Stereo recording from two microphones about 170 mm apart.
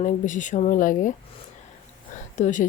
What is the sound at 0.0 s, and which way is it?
Speech, 45° left (ahead or behind).